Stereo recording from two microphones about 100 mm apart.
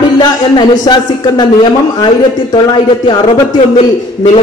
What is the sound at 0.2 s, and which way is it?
A man's voice, 50° left (ahead or behind).